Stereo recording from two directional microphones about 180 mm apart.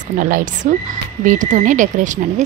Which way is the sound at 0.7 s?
45° right (ahead or behind).